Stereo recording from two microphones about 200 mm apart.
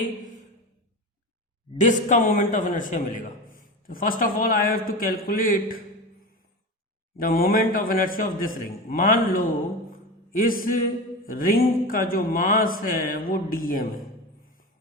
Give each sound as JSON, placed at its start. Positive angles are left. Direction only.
{"t": 1.8, "sound": "a man's voice", "side_deg": 40}
{"t": 7.2, "sound": "a man's voice", "side_deg": 45}